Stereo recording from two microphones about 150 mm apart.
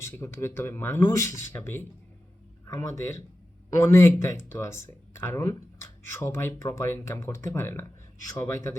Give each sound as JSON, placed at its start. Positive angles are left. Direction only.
{"t": 0.0, "sound": "speech", "side_deg": 15}